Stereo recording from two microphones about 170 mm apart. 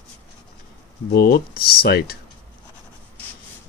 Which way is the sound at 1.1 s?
65° left (ahead or behind).